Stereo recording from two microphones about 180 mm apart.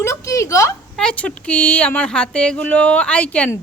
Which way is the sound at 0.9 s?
5° left (ahead or behind).